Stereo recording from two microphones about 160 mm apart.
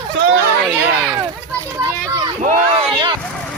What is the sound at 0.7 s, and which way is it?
Speech, 5° right (ahead or behind).